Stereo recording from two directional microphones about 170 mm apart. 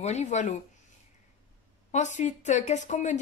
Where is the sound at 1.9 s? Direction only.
45° left (ahead or behind).